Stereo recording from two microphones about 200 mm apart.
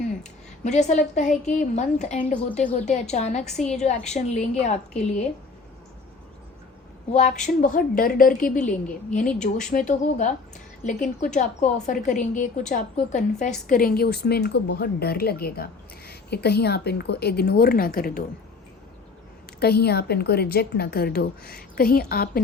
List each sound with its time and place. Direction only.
0.2 s a woman's voice: 35° left (ahead or behind)
7.1 s a woman's voice: 35° left (ahead or behind)
19.5 s a woman's voice: 55° left (ahead or behind)